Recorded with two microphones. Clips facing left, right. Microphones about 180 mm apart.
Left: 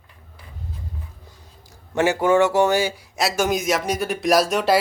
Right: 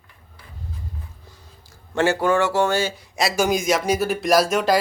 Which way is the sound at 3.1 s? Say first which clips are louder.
Right 1 dB; centre (ahead or behind).